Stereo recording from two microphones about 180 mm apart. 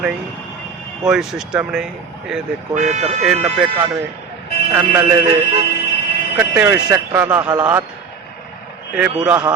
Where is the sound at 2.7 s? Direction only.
40° right (ahead or behind).